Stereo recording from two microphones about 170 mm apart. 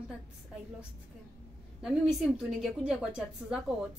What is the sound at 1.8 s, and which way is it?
A woman's voice, centre (ahead or behind).